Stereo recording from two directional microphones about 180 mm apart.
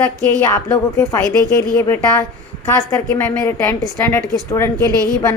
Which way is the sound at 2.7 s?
10° left (ahead or behind).